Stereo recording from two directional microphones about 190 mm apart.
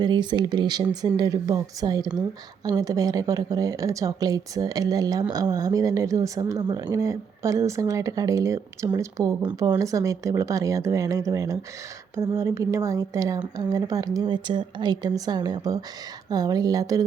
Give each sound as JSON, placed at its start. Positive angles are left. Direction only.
{"t": 0.0, "sound": "a woman's voice", "side_deg": -25}